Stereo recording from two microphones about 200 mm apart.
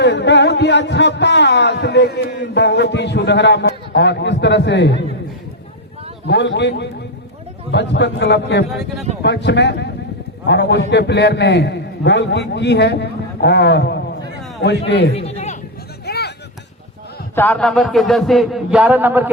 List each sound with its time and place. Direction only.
0.0 s speech: 60° left (ahead or behind)
6.2 s a man's voice: 60° left (ahead or behind)
8.7 s a man's voice: centre (ahead or behind)
9.2 s a man's voice: 60° left (ahead or behind)
15.1 s a sound: 30° left (ahead or behind)
16.0 s a sound: 55° left (ahead or behind)
17.3 s a man's voice: 10° left (ahead or behind); by 19.3 s 10° right (ahead or behind)